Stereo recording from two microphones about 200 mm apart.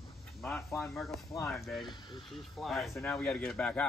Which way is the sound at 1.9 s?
25° left (ahead or behind).